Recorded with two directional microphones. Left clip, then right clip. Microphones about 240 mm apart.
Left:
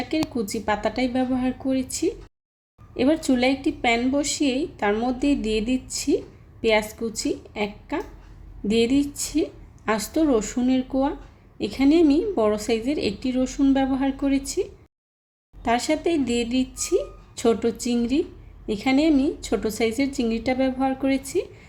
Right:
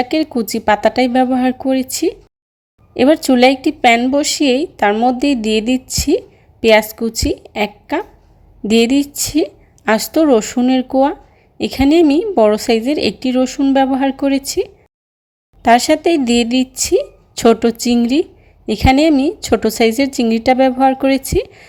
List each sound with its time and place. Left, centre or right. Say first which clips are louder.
0.0 s a woman's voice: right 9 dB; right